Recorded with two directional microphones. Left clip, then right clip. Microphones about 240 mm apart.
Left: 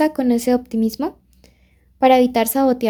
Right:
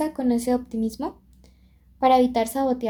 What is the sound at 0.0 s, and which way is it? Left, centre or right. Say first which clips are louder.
A woman's voice: left 7 dB; left.